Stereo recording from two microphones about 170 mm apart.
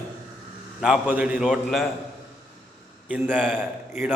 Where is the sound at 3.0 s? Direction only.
10° right (ahead or behind).